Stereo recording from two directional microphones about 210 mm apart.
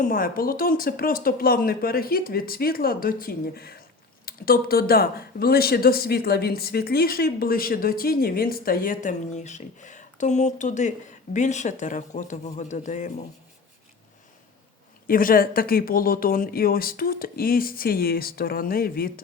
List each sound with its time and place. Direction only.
0.0 s speech: 40° left (ahead or behind)
15.0 s speech: 40° left (ahead or behind)